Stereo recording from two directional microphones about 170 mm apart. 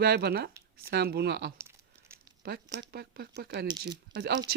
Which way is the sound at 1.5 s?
15° right (ahead or behind).